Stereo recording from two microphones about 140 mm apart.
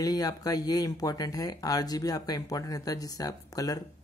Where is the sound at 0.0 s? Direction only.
25° left (ahead or behind).